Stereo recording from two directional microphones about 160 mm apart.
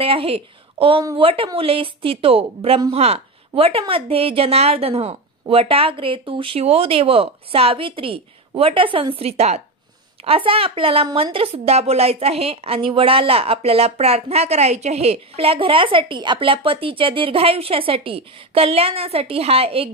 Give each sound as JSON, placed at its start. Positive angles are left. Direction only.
{"t": 0.0, "sound": "a woman's voice", "side_deg": -35}